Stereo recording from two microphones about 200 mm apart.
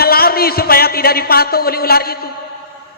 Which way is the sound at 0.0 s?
50° left (ahead or behind).